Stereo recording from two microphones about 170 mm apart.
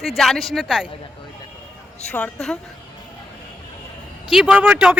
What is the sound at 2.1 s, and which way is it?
Speech, 5° left (ahead or behind).